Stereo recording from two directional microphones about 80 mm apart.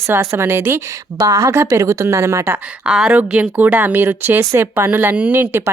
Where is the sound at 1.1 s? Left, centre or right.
Right.